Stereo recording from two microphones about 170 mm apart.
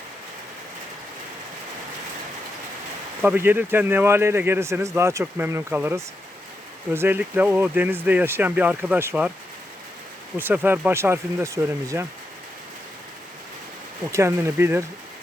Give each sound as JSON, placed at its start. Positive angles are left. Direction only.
{"t": 3.2, "sound": "speech", "side_deg": -10}
{"t": 10.3, "sound": "speech", "side_deg": -10}
{"t": 14.1, "sound": "speech", "side_deg": -15}